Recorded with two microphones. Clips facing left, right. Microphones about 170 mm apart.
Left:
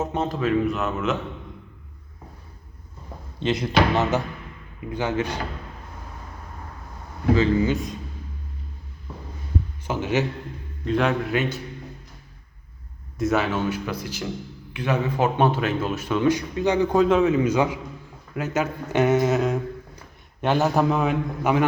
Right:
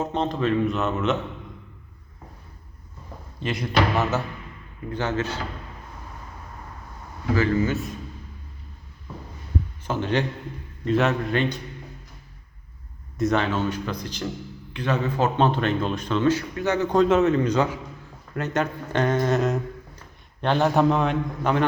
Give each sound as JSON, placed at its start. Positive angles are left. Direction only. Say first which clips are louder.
{"t": 0.0, "sound": "speech", "louder": "even", "side_deg": 5}
{"t": 3.4, "sound": "speech", "louder": "left 2 dB", "side_deg": 20}
{"t": 7.3, "sound": "speech", "louder": "even", "side_deg": 20}
{"t": 9.8, "sound": "a man's voice", "louder": "left 1 dB", "side_deg": 10}
{"t": 13.1, "sound": "speech", "louder": "even", "side_deg": 5}
{"t": 17.0, "sound": "a man's voice", "louder": "right 2 dB", "side_deg": 0}